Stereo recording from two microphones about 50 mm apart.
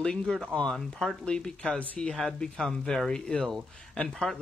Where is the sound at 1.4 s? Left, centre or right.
Centre.